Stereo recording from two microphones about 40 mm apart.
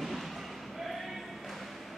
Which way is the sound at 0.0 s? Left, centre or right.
Centre.